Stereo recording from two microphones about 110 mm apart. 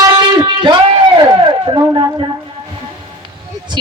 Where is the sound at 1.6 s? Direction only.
40° right (ahead or behind).